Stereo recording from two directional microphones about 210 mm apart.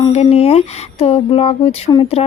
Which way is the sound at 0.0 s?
30° left (ahead or behind).